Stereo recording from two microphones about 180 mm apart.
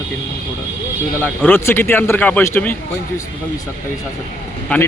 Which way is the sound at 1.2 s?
10° left (ahead or behind).